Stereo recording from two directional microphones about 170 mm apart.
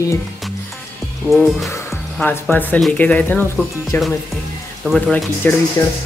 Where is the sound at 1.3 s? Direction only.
Centre (ahead or behind).